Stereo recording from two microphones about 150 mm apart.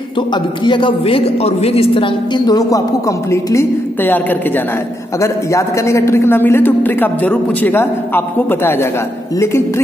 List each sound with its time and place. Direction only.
0.3 s a woman's voice: 30° left (ahead or behind); by 8.8 s 15° left (ahead or behind)